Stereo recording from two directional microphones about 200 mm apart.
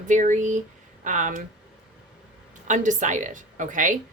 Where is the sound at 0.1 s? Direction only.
40° right (ahead or behind).